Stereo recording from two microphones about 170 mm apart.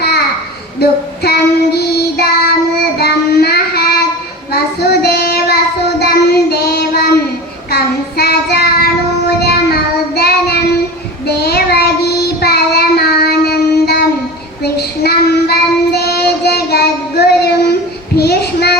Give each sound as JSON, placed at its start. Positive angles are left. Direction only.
{"t": 0.8, "sound": "child singing", "side_deg": 70}
{"t": 9.4, "sound": "music", "side_deg": 65}
{"t": 10.2, "sound": "child singing", "side_deg": 70}
{"t": 18.2, "sound": "a sound", "side_deg": 70}